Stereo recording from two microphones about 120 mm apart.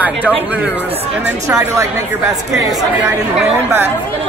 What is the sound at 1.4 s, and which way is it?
Speech, 25° right (ahead or behind).